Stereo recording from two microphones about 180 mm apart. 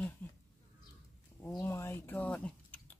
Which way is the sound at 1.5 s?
15° left (ahead or behind).